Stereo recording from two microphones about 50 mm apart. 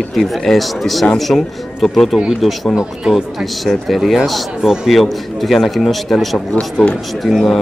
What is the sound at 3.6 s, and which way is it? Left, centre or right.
A man's voice, centre.